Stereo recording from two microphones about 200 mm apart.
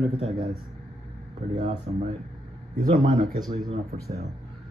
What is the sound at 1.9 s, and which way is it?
Speech, 30° right (ahead or behind).